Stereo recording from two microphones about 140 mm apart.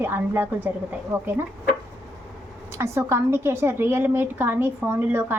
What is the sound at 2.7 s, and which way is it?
A woman's voice, 20° right (ahead or behind).